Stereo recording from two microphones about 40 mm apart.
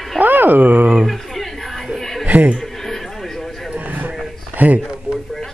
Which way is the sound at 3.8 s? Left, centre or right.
Right.